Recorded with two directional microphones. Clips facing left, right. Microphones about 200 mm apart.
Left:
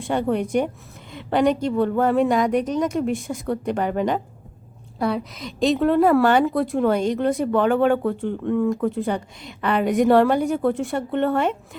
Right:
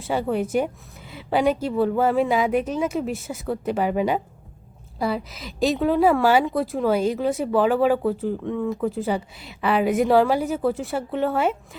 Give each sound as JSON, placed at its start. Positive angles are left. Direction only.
{"t": 0.0, "sound": "a woman's voice", "side_deg": -5}